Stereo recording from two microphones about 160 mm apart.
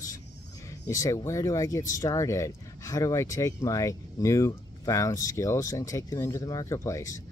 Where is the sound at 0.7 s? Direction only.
20° left (ahead or behind).